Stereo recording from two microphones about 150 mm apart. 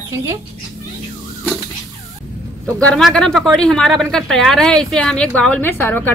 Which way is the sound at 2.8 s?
5° left (ahead or behind).